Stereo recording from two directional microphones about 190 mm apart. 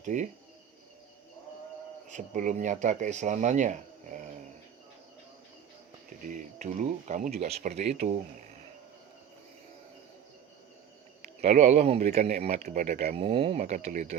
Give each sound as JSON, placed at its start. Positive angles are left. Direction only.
{"t": 0.0, "sound": "speech", "side_deg": -40}
{"t": 2.0, "sound": "speech", "side_deg": -40}
{"t": 6.2, "sound": "speech", "side_deg": -40}
{"t": 11.3, "sound": "speech", "side_deg": -40}